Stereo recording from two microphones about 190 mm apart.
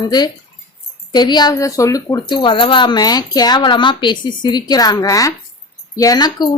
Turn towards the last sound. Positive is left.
turn(degrees=20)  # may be behind; listen again after turning